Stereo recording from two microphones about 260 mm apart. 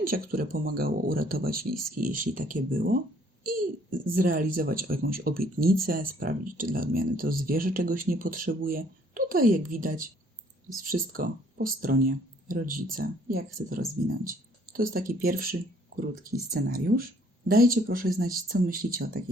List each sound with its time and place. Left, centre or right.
0.0 s speech: right
4.1 s speech: right